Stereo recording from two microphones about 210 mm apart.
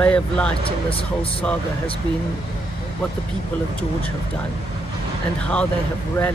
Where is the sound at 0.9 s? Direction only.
25° left (ahead or behind).